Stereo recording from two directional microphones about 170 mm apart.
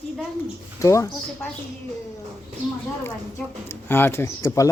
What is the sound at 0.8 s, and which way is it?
Speech, 15° left (ahead or behind).